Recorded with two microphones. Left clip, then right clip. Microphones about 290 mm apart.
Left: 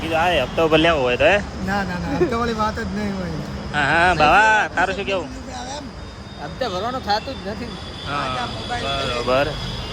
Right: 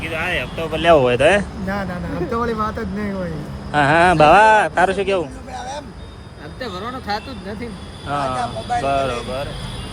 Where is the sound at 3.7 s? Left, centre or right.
Centre.